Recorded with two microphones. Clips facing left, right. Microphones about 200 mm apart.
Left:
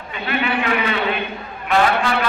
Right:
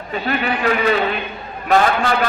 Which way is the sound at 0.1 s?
40° right (ahead or behind).